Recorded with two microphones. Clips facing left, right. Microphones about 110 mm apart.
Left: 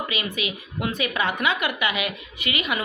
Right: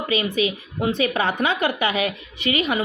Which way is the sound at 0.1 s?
35° right (ahead or behind).